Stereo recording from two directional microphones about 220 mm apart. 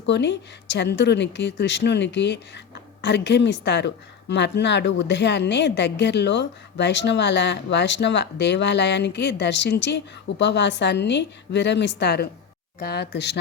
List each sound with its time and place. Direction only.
0.0 s speech: 55° left (ahead or behind)